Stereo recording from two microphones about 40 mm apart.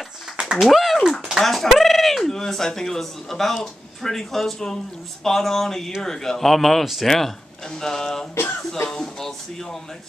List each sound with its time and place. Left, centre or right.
0.6 s speech: centre
8.4 s speech: left
8.9 s speech: centre